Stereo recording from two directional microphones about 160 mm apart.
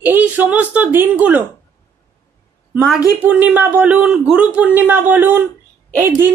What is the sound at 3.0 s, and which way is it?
A man's voice, 10° right (ahead or behind).